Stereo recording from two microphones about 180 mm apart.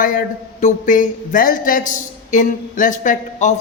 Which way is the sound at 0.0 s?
50° left (ahead or behind).